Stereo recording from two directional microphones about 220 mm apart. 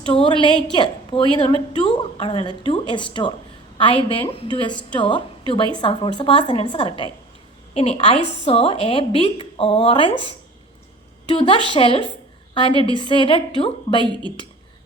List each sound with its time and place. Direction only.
0.1 s a woman's voice: 25° left (ahead or behind)